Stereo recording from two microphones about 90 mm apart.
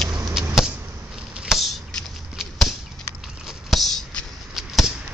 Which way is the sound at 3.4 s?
Centre (ahead or behind).